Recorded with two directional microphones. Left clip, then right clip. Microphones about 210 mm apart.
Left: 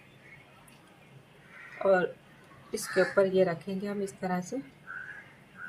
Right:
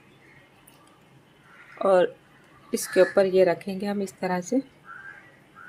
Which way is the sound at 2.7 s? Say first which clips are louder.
Right 6 dB; 45° right (ahead or behind).